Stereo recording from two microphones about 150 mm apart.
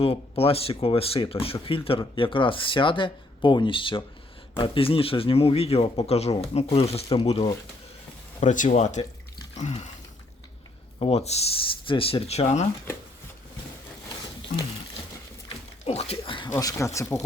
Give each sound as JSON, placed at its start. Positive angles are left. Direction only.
{"t": 0.0, "sound": "speech", "side_deg": 40}
{"t": 8.4, "sound": "speech", "side_deg": 55}
{"t": 11.0, "sound": "speech", "side_deg": 45}
{"t": 15.9, "sound": "a sound", "side_deg": 45}
{"t": 16.5, "sound": "speech", "side_deg": 20}